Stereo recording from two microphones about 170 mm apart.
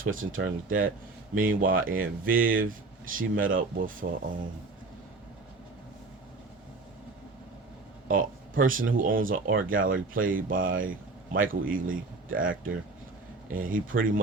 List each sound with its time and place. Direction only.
0.0 s speech: 55° right (ahead or behind)
8.0 s speech: 50° right (ahead or behind)